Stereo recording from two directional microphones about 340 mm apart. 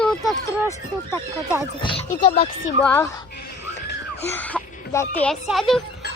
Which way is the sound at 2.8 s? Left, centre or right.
Centre.